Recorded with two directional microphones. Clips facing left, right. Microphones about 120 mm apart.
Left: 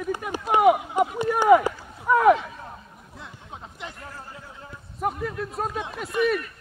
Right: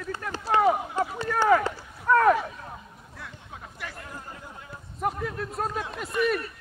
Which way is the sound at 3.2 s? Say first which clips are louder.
Left 2 dB; 20° left (ahead or behind).